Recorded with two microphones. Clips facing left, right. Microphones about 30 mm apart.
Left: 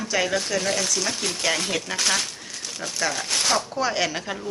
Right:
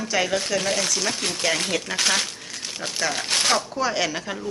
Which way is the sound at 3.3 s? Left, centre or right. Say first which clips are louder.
Right 4 dB; right.